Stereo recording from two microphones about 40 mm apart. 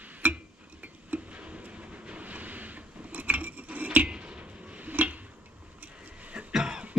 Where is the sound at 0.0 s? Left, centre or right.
Right.